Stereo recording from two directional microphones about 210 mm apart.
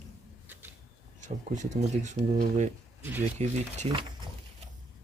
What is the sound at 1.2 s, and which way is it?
Speech, 35° right (ahead or behind).